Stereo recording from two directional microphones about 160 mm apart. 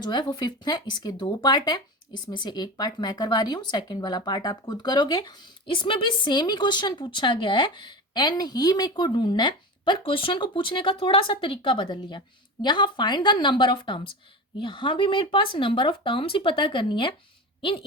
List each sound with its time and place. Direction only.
0.0 s speech: 25° left (ahead or behind)